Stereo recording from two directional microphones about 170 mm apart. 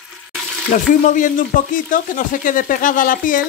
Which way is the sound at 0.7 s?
50° left (ahead or behind).